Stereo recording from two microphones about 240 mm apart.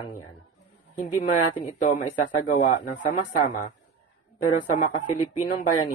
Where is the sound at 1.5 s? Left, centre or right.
Left.